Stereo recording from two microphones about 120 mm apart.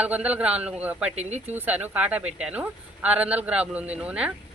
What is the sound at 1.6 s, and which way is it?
Speech, 15° right (ahead or behind).